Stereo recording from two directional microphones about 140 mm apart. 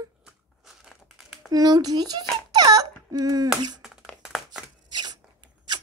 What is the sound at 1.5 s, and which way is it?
Speech, 25° right (ahead or behind).